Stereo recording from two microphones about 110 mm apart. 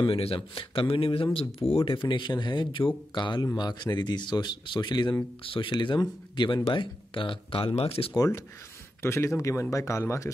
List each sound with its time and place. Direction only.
0.0 s speech: 60° left (ahead or behind)
1.9 s speech: 45° left (ahead or behind)
5.4 s speech: 50° left (ahead or behind)
8.1 s speech: 25° left (ahead or behind)